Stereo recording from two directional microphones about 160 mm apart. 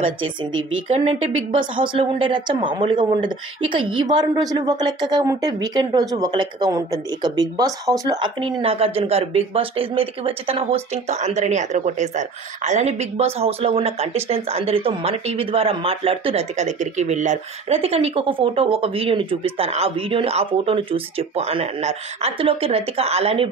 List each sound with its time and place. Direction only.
0.9 s a woman's voice: 40° right (ahead or behind)